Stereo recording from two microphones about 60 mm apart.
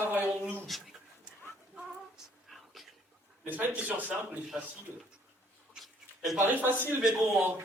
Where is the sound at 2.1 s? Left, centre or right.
Centre.